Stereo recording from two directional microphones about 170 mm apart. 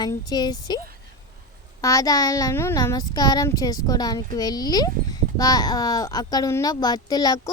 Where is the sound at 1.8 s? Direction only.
20° left (ahead or behind).